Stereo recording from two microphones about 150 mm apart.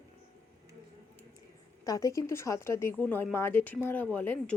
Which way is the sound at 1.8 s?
20° left (ahead or behind).